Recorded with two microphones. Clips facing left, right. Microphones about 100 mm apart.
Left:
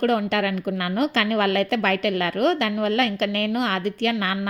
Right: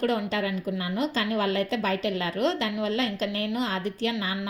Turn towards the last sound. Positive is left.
turn(degrees=60)  # may be behind; listen again after turning